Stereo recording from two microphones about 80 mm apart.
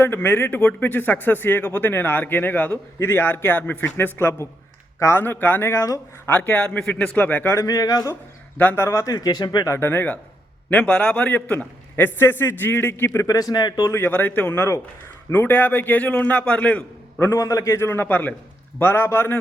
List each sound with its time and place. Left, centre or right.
0.0 s a man's voice: left; by 7.2 s centre
7.2 s speech: left
7.5 s speech: left
8.5 s a man's voice: left
8.8 s speech: left
9.1 s speech: left
9.6 s speech: left
13.2 s speech: left
13.9 s speech: left
17.2 s speech: left
17.7 s speech: left